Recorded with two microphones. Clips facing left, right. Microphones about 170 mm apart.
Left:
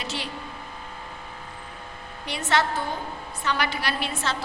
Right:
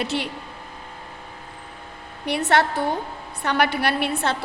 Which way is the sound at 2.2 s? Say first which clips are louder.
Right 5 dB; 60° right (ahead or behind).